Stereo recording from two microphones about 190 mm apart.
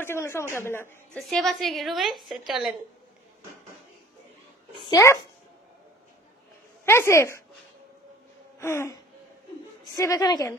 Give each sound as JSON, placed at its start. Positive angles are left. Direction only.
{"t": 0.0, "sound": "speech", "side_deg": 10}
{"t": 1.6, "sound": "a woman's voice", "side_deg": 0}
{"t": 4.8, "sound": "speech", "side_deg": 15}
{"t": 6.9, "sound": "speech", "side_deg": 15}
{"t": 8.5, "sound": "gasp", "side_deg": 15}
{"t": 9.9, "sound": "speech", "side_deg": 20}